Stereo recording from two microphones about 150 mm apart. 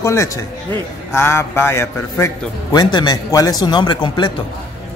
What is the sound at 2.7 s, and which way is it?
A man's voice, 25° left (ahead or behind).